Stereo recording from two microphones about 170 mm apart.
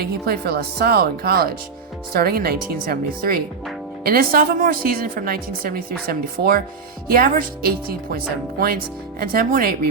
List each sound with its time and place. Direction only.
0.0 s a woman's voice: 65° right (ahead or behind)